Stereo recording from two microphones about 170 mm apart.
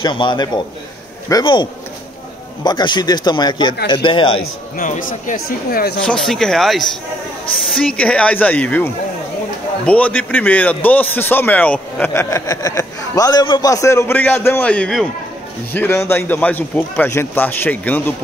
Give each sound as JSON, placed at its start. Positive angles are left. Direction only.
{"t": 0.0, "sound": "speech", "side_deg": 25}
{"t": 4.7, "sound": "speech", "side_deg": 50}
{"t": 6.0, "sound": "a man's voice", "side_deg": 0}
{"t": 15.7, "sound": "a man's voice", "side_deg": 15}